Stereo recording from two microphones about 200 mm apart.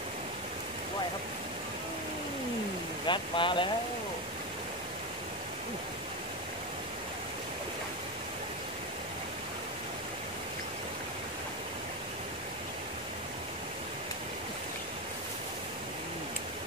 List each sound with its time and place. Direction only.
3.1 s speech: 25° left (ahead or behind)